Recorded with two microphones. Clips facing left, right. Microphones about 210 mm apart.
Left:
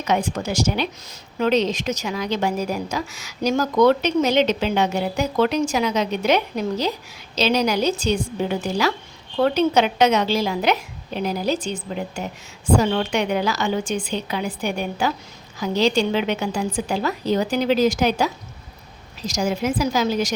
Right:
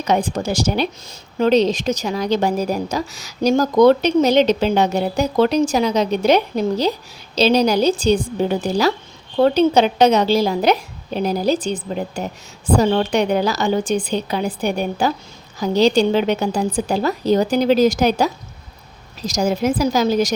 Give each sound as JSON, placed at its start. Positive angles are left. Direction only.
{"t": 0.0, "sound": "speech", "side_deg": -35}